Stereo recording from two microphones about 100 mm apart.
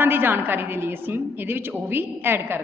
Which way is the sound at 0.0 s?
20° right (ahead or behind).